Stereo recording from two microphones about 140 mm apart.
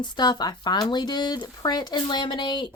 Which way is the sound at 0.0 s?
30° left (ahead or behind).